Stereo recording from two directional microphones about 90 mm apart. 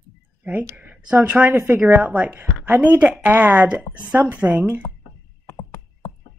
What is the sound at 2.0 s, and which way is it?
Speech, 15° right (ahead or behind).